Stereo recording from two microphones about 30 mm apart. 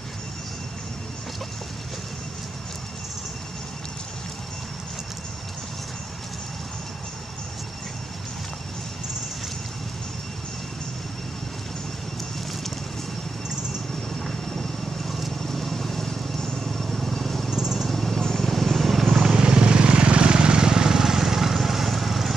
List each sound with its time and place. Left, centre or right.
15.0 s vehicle: centre
16.5 s vehicle: centre
17.1 s a sound: centre
17.5 s a sound: centre
17.8 s vehicle: centre
19.2 s vehicle: right; by 22.3 s centre